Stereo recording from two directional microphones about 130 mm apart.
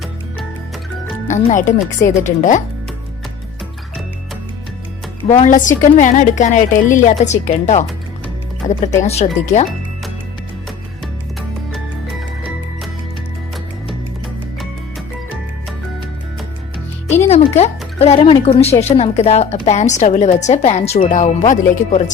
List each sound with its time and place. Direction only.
1.5 s a woman's voice: 80° left
5.5 s a woman's voice: 80° left
9.0 s a woman's voice: 55° left (ahead or behind)
17.1 s a woman's voice: 55° left (ahead or behind); by 22.1 s 70° left (ahead or behind)